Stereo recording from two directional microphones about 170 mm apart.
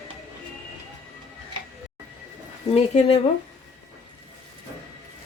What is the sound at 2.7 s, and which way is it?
Speech, 35° left (ahead or behind).